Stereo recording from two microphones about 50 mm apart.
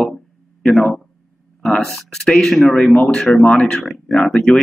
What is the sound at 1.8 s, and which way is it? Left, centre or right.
Speech, centre.